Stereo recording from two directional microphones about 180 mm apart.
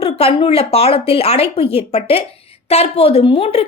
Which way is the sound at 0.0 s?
30° left (ahead or behind).